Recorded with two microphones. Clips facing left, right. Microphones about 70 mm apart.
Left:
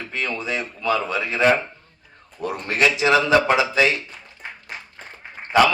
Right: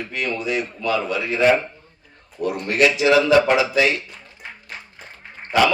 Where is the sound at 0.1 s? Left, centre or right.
Left.